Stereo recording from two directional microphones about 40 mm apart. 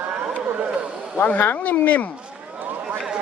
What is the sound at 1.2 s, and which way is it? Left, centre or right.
Speech, left.